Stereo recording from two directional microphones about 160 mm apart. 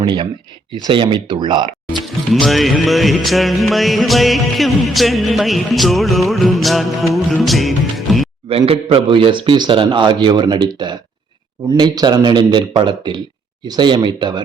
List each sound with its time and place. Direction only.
0.0 s speech: 30° right (ahead or behind)
1.9 s music: centre (ahead or behind)
8.4 s a man's voice: 35° right (ahead or behind)